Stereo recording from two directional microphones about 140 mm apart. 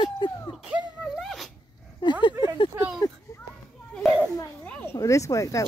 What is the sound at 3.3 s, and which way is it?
Children playing, 25° left (ahead or behind).